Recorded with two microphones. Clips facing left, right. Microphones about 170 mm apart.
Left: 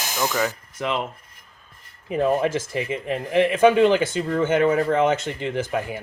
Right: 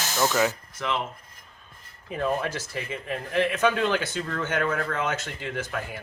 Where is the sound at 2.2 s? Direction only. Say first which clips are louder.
Left 7 dB; 20° left (ahead or behind).